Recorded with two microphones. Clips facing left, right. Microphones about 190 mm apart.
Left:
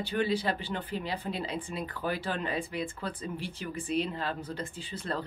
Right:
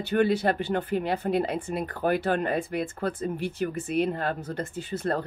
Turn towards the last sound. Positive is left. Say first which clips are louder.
# right 7 dB
turn(degrees=-50)  # may be behind; listen again after turning